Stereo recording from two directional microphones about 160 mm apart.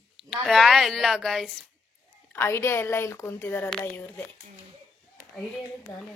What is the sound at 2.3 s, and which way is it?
A woman's voice, 15° left (ahead or behind).